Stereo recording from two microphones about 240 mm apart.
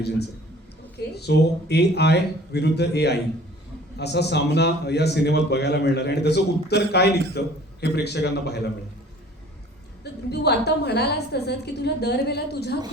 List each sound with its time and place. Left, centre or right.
0.9 s a man's voice: left
10.0 s a man's voice: left